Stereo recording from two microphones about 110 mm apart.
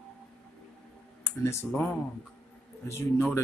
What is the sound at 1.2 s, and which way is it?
Speech, 25° left (ahead or behind).